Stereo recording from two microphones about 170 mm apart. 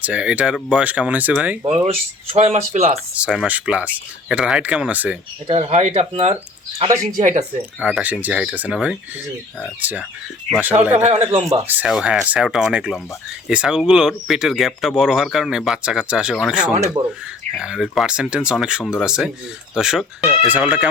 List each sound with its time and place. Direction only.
0.0 s speech: 5° right (ahead or behind)
1.6 s speech: 35° right (ahead or behind)
3.2 s speech: 5° right (ahead or behind)
5.5 s speech: 35° right (ahead or behind)
6.8 s speech: 20° right (ahead or behind)
7.2 s speech: 45° right (ahead or behind)
7.8 s speech: 5° right (ahead or behind)
10.9 s speech: 40° right (ahead or behind)
11.7 s speech: 5° right (ahead or behind)